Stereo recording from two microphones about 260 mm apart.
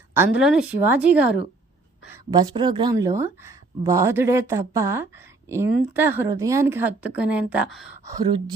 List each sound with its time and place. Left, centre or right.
0.1 s a woman's voice: centre
8.0 s a woman's voice: centre